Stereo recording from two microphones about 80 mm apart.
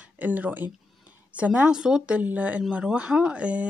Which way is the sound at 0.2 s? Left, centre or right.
Centre.